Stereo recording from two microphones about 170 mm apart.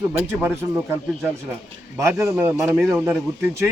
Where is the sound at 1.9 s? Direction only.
15° right (ahead or behind).